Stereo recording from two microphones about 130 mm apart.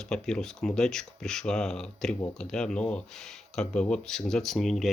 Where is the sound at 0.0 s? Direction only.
5° left (ahead or behind).